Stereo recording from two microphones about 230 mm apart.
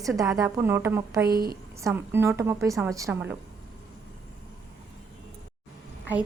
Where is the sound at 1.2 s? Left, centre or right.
Right.